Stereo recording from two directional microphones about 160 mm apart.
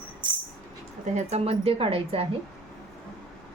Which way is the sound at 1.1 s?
40° right (ahead or behind).